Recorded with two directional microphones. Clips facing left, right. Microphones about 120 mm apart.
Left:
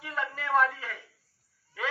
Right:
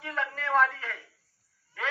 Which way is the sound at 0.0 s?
10° left (ahead or behind).